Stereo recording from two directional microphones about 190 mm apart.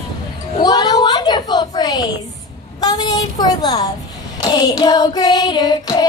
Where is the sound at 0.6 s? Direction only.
20° left (ahead or behind).